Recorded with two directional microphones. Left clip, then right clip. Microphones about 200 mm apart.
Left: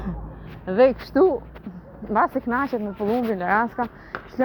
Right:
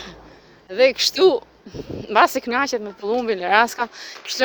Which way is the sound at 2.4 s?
70° right (ahead or behind).